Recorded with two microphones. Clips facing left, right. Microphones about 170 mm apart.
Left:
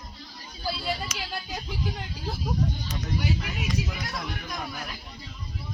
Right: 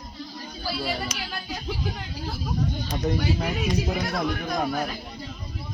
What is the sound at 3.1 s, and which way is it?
Speech, 55° right (ahead or behind).